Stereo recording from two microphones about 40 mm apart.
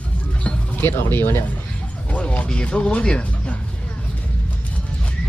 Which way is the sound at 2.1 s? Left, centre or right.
Left.